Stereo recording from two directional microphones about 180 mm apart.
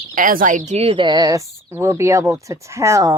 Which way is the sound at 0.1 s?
50° right (ahead or behind).